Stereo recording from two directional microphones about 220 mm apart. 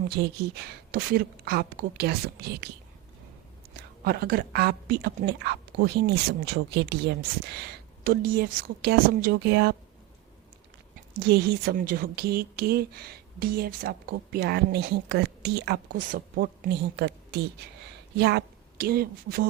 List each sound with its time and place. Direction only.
0.2 s a woman's voice: 45° right (ahead or behind)
3.8 s a woman's voice: 45° right (ahead or behind)
10.9 s a woman's voice: 45° right (ahead or behind)